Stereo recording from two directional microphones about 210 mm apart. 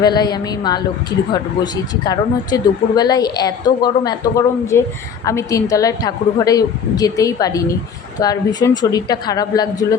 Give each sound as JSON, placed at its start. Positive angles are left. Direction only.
{"t": 0.0, "sound": "a woman's voice", "side_deg": 20}